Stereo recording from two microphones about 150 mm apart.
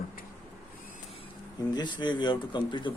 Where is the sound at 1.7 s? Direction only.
30° left (ahead or behind).